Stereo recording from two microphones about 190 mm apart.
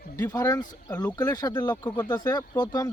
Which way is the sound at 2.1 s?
20° left (ahead or behind).